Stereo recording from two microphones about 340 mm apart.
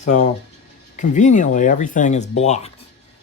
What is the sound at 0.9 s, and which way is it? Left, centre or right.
Speech, left.